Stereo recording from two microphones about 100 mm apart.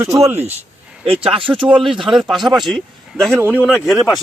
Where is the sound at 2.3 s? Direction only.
Centre (ahead or behind).